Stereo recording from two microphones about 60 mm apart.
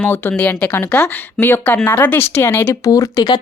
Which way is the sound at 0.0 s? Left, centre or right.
Left.